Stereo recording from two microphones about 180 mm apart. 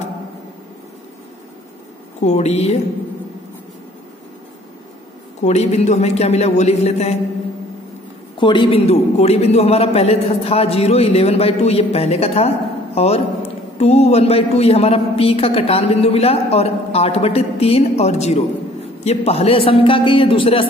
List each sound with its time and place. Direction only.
2.2 s a man's voice: 35° left (ahead or behind)
5.4 s a man's voice: 40° left (ahead or behind)
8.4 s a man's voice: 25° left (ahead or behind)